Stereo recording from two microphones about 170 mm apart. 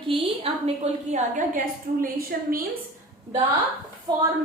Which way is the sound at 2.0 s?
60° right (ahead or behind).